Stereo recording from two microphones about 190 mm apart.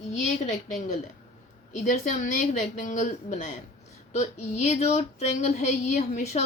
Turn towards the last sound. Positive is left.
turn(degrees=40)  # may be behind; listen again after turning